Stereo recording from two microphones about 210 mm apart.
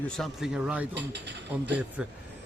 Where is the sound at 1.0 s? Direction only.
55° right (ahead or behind).